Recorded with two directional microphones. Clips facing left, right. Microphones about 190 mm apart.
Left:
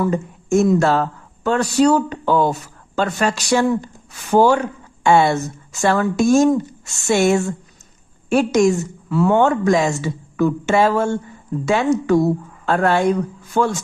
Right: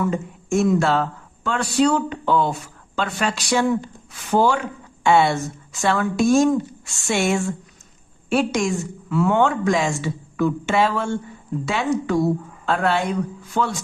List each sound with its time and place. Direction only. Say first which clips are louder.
0.0 s a woman's voice: left 3 dB; 40° left (ahead or behind)